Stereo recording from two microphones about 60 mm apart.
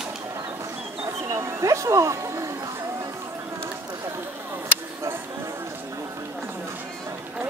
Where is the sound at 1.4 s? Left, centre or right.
Right.